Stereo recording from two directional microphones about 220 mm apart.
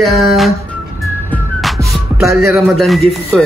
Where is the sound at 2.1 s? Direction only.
Centre (ahead or behind).